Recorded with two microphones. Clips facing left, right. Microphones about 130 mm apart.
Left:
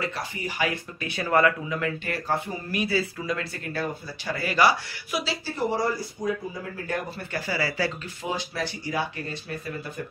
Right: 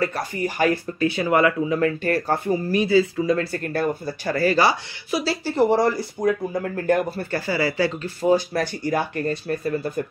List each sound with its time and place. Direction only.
0.0 s speech: 45° right (ahead or behind)
1.0 s speech: 25° right (ahead or behind)
1.8 s speech: 40° right (ahead or behind)
2.8 s speech: 25° right (ahead or behind)
3.5 s speech: 50° right (ahead or behind)
4.3 s speech: 40° right (ahead or behind)
5.5 s speech: 70° right (ahead or behind)
7.3 s speech: 30° right (ahead or behind)
8.2 s speech: 45° right (ahead or behind)